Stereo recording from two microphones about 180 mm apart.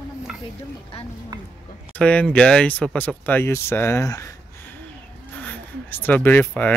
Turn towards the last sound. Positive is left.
turn(degrees=10)  # may be behind; listen again after turning